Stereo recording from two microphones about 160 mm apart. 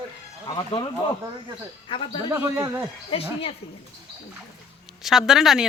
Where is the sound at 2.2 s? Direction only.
15° right (ahead or behind).